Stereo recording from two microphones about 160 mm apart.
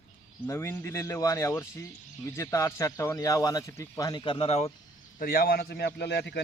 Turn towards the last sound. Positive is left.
turn(degrees=90)